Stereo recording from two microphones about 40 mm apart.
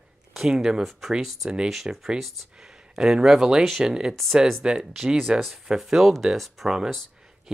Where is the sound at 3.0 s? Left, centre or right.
Centre.